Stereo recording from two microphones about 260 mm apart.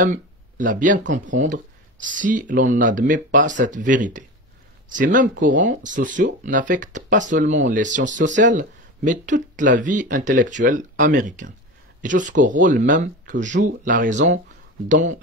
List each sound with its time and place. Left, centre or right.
0.0 s speech: right